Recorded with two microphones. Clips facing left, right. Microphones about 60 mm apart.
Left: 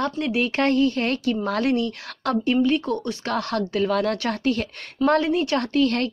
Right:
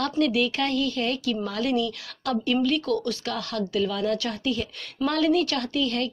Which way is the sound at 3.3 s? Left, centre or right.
Left.